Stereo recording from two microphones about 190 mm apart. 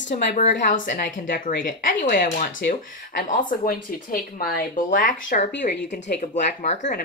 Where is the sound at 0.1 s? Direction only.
40° left (ahead or behind).